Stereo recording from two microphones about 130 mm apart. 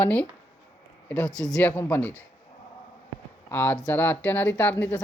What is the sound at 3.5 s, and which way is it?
Speech, 15° left (ahead or behind).